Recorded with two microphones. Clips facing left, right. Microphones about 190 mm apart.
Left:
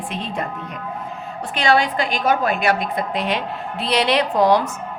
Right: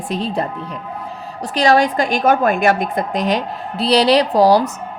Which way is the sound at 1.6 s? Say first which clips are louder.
Right 4 dB; 40° right (ahead or behind).